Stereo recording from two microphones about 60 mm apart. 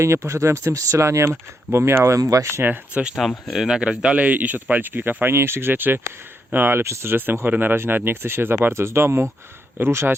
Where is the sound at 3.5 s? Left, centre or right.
Centre; by 7.1 s right.